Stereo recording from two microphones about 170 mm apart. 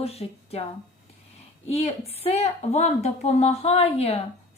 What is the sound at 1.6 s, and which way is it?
A woman's voice, 35° left (ahead or behind).